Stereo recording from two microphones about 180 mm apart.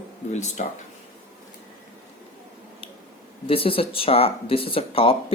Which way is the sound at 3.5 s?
30° left (ahead or behind).